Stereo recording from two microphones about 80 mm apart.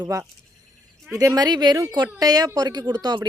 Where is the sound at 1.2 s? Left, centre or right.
Right.